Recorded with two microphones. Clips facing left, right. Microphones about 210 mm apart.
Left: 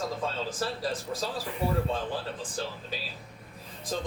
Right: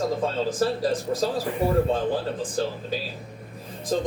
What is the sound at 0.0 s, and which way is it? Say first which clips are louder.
Speech: right 8 dB; 45° right (ahead or behind).